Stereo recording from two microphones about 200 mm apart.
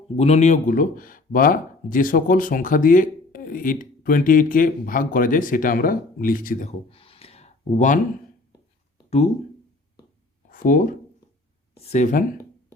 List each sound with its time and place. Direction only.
0.2 s speech: 35° left (ahead or behind)
6.7 s a sound: 30° left (ahead or behind)
10.5 s speech: 45° left (ahead or behind)